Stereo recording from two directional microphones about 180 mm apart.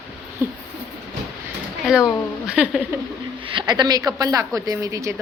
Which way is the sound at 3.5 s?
25° right (ahead or behind).